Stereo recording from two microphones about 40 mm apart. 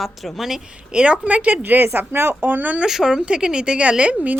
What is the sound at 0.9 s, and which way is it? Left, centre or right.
Speech, right.